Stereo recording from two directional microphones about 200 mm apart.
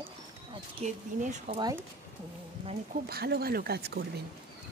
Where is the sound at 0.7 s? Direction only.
35° right (ahead or behind).